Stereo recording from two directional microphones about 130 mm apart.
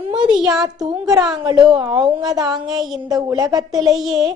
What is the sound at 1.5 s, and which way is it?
A woman's voice, 30° right (ahead or behind).